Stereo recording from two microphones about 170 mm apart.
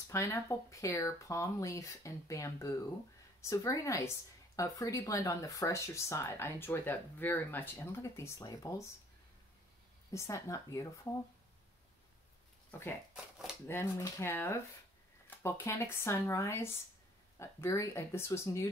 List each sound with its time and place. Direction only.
0.1 s speech: 15° left (ahead or behind)
10.1 s speech: 15° left (ahead or behind)
13.7 s speech: 15° left (ahead or behind)